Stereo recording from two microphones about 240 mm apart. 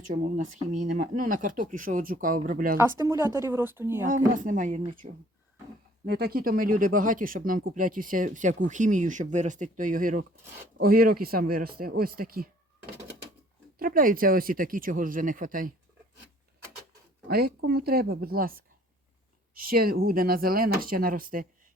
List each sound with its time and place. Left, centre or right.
0.1 s speech: right
2.7 s speech: centre
4.0 s speech: right
6.1 s speech: right
13.7 s speech: right
17.2 s speech: right